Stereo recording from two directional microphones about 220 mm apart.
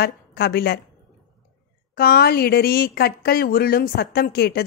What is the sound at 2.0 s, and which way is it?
A woman's voice, 45° left (ahead or behind).